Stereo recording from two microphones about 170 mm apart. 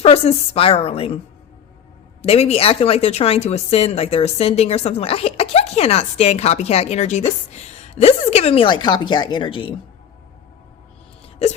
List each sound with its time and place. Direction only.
0.0 s speech: 35° left (ahead or behind)
2.2 s speech: 35° left (ahead or behind)